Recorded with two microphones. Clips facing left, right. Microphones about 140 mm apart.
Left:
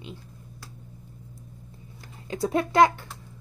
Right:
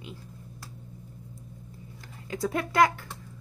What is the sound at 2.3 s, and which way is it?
Speech, 25° left (ahead or behind).